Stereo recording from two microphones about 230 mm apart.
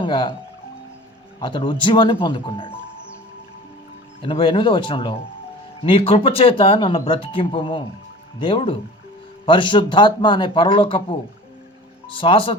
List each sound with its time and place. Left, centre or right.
0.0 s speech: left
1.4 s speech: left
4.2 s speech: left
12.1 s speech: left